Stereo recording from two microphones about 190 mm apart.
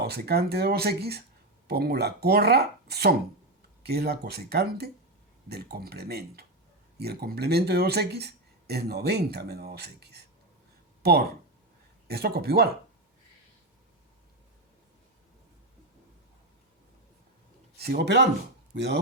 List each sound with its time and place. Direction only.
0.0 s speech: 55° right (ahead or behind)
17.7 s speech: 55° right (ahead or behind)